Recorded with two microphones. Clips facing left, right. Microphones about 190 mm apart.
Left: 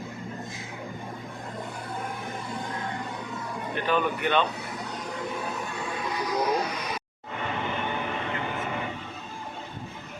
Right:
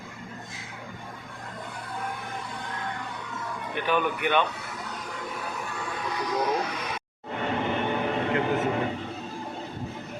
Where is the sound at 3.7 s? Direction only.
15° right (ahead or behind).